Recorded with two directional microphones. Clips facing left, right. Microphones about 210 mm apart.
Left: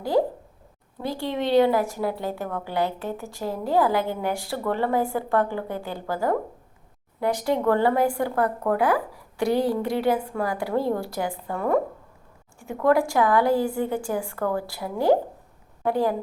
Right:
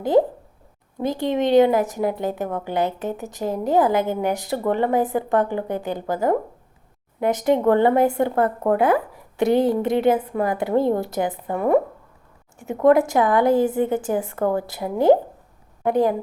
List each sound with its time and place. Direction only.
0.9 s a woman's voice: 20° right (ahead or behind)